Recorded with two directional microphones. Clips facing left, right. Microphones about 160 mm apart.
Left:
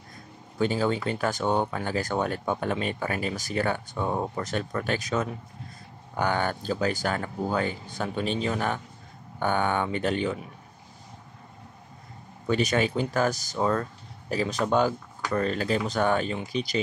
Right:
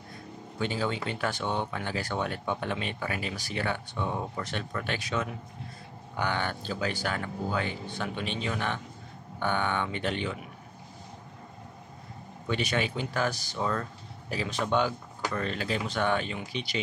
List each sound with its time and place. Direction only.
0.6 s speech: 40° left (ahead or behind)
12.4 s speech: 40° left (ahead or behind)